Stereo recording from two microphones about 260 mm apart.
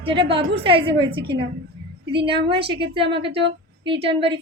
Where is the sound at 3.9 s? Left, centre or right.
Right.